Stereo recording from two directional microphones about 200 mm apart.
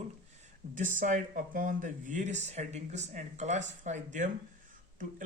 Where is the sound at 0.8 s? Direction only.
40° right (ahead or behind).